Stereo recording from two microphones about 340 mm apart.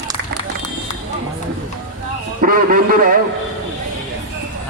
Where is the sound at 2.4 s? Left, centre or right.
Right.